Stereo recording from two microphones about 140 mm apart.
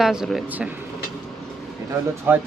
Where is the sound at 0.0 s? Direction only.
5° right (ahead or behind).